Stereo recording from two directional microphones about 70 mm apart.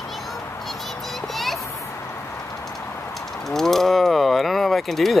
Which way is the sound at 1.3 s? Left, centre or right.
Centre.